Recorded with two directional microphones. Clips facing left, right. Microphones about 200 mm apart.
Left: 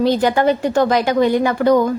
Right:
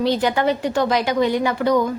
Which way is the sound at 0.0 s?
45° left (ahead or behind).